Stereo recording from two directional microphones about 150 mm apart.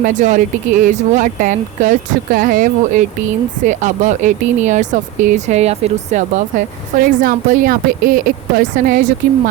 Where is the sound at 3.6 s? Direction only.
55° right (ahead or behind).